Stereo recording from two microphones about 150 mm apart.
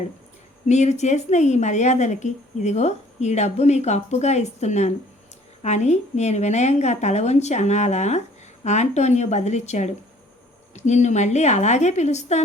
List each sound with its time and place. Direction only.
0.7 s a woman's voice: 50° left (ahead or behind)